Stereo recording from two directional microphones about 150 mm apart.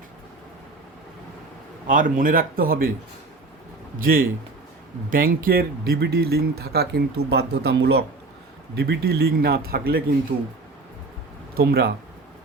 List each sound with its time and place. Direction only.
1.9 s speech: 65° right (ahead or behind)
3.9 s speech: 70° right (ahead or behind); by 10.0 s 90° right
11.5 s speech: 90° right